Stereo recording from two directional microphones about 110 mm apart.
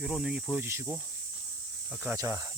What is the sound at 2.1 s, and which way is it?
Speech, 25° right (ahead or behind).